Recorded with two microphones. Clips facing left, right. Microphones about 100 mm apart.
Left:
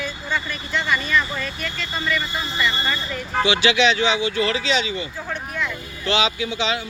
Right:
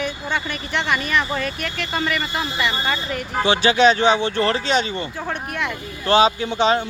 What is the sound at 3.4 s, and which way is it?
Speech, 45° right (ahead or behind).